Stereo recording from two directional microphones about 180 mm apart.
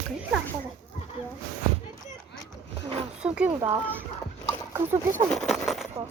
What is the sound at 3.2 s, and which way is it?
Speech, 10° right (ahead or behind).